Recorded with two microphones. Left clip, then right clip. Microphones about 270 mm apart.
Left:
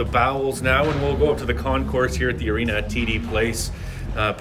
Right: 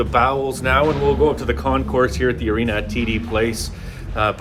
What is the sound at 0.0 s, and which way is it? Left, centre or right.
Speech, centre.